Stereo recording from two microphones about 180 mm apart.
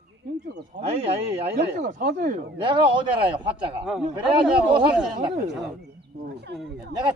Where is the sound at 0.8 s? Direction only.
35° right (ahead or behind).